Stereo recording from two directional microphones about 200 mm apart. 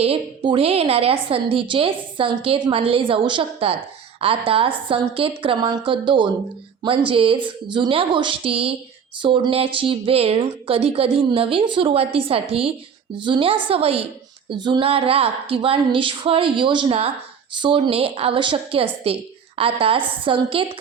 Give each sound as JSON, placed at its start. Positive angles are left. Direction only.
{"t": 0.0, "sound": "a woman's voice", "side_deg": -25}